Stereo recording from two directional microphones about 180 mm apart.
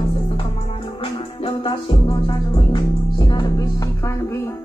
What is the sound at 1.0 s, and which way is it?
Music, 30° left (ahead or behind).